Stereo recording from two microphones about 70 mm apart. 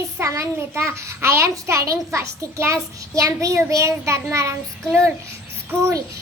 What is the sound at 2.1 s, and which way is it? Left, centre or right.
Child singing, right.